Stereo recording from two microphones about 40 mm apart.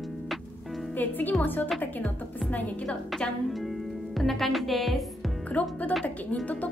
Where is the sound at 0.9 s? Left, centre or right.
Left.